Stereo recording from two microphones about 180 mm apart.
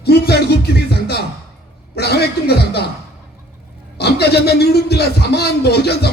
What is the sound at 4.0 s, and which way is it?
A man's voice, 65° left (ahead or behind).